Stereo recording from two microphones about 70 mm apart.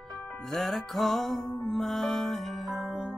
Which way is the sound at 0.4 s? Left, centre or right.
Centre.